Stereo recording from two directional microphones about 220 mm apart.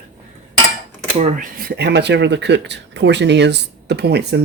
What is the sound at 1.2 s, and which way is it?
Speech, 40° right (ahead or behind).